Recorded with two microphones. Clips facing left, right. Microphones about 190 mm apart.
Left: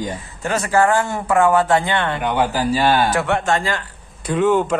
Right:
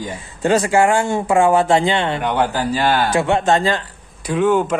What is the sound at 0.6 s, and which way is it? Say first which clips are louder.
Speech: right 1 dB; 25° right (ahead or behind).